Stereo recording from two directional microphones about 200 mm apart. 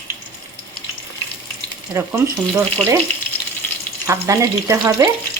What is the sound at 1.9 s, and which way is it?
Speech, 15° right (ahead or behind).